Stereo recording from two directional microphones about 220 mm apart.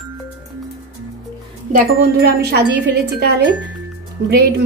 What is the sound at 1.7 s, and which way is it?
A woman's voice, 40° right (ahead or behind).